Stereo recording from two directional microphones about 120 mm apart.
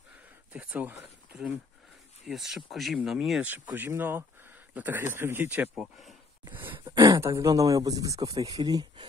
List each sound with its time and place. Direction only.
0.5 s speech: 15° right (ahead or behind)
6.4 s a sound: 15° right (ahead or behind)
6.8 s speech: 35° right (ahead or behind)
7.2 s speech: 25° right (ahead or behind)